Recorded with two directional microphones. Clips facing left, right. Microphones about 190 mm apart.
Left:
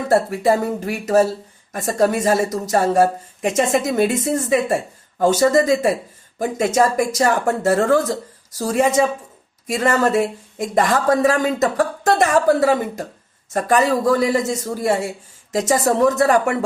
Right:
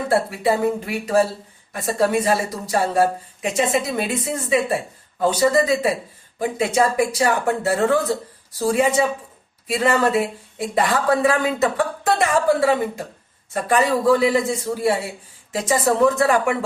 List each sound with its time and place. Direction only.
0.1 s a woman's voice: 45° left (ahead or behind)